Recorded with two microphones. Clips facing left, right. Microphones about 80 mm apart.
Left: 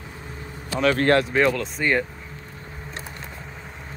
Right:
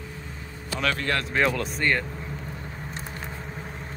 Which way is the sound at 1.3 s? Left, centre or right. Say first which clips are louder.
Left 3 dB; centre.